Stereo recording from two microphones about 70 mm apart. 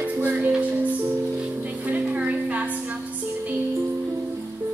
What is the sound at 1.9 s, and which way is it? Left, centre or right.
Music, right.